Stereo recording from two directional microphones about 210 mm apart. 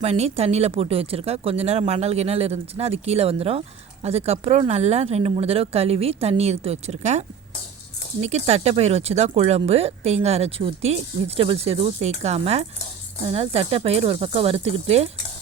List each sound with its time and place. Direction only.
0.0 s speech: 30° right (ahead or behind)